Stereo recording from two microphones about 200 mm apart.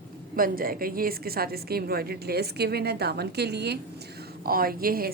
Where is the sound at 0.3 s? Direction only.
45° right (ahead or behind).